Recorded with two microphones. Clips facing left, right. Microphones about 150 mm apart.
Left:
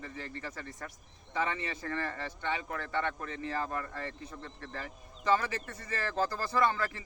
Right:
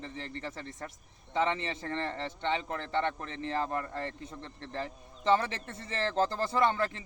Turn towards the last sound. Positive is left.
turn(degrees=-25)  # may be behind; listen again after turning